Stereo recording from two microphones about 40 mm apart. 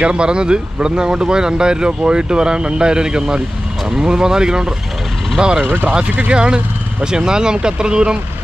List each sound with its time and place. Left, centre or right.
0.0 s speech: right
5.6 s speech: right
5.9 s speech: right